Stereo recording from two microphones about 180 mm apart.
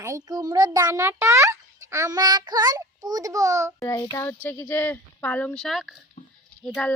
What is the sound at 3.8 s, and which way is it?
Speech, 15° left (ahead or behind).